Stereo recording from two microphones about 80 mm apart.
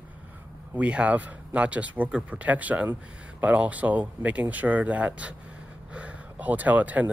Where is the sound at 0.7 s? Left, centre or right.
Centre.